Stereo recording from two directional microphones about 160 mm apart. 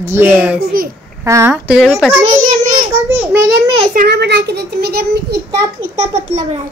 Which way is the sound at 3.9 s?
75° right (ahead or behind).